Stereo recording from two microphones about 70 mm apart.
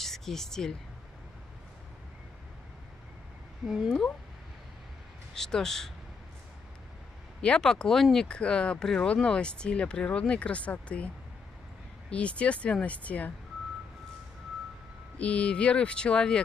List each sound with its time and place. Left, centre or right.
0.0 s speech: centre
3.6 s speech: centre
5.3 s speech: centre
7.4 s speech: centre
12.1 s speech: centre
15.1 s speech: centre